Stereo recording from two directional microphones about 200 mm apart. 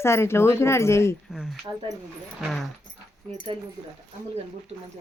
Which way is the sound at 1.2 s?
Centre (ahead or behind).